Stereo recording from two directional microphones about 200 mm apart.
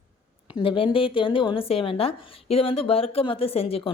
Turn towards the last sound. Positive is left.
turn(degrees=30)  # may be behind; listen again after turning